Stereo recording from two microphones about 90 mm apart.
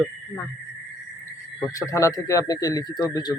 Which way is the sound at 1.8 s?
35° left (ahead or behind).